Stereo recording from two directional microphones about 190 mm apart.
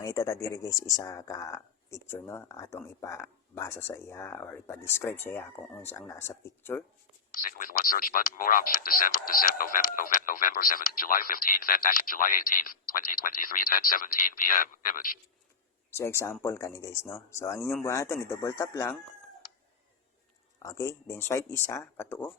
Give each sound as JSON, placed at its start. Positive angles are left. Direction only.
{"t": 0.0, "sound": "speech", "side_deg": 15}
{"t": 7.3, "sound": "speech", "side_deg": 45}
{"t": 15.9, "sound": "speech", "side_deg": 15}
{"t": 20.6, "sound": "speech", "side_deg": 15}